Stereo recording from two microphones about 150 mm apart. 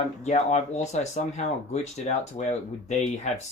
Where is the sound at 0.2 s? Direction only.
50° left (ahead or behind).